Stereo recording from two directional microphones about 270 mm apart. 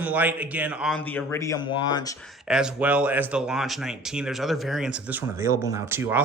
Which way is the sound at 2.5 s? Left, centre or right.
Centre.